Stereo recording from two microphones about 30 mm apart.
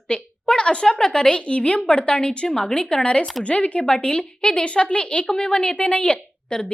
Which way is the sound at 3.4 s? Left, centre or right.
Left.